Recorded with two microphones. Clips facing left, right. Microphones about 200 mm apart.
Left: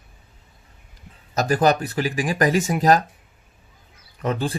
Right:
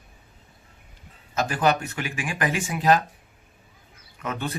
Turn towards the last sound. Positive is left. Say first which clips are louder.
# left 6 dB
turn(degrees=35)  # may be behind; listen again after turning